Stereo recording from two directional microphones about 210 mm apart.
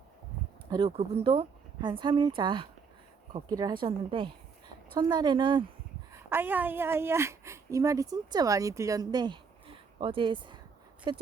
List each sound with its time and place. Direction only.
0.7 s speech: 25° right (ahead or behind)
6.3 s speech: 10° right (ahead or behind)